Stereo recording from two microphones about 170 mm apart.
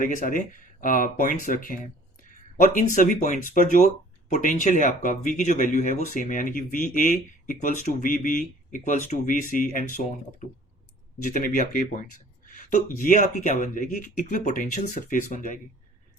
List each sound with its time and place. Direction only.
0.0 s speech: 50° left (ahead or behind)
2.7 s speech: 50° left (ahead or behind)